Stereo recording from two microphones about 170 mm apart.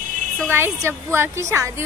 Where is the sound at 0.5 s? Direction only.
15° right (ahead or behind).